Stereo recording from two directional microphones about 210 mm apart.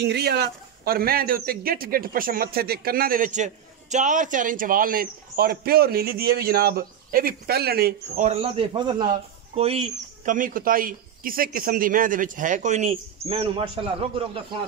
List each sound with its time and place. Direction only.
0.0 s a man's voice: 50° right (ahead or behind)
8.3 s a man's voice: 25° right (ahead or behind)